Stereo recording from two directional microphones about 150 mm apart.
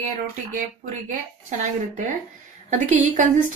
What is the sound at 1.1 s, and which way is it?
A woman's voice, 55° right (ahead or behind).